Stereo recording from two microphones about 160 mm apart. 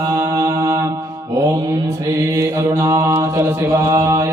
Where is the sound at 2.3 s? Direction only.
20° right (ahead or behind).